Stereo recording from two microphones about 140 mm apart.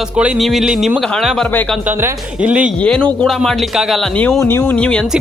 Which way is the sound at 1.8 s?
15° right (ahead or behind).